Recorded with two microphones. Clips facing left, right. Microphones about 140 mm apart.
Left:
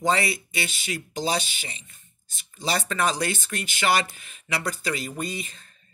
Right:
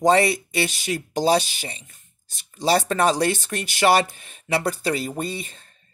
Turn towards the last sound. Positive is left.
turn(degrees=-35)  # may be behind; listen again after turning